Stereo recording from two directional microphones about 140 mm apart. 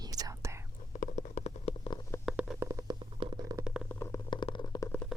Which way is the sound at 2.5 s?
20° right (ahead or behind).